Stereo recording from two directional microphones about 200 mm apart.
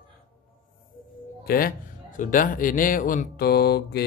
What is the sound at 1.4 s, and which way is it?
Speech, 45° left (ahead or behind).